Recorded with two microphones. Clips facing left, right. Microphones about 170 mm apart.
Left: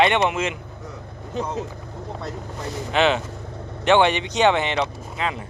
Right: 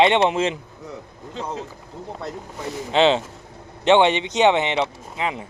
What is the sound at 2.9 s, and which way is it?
Speech, 25° right (ahead or behind).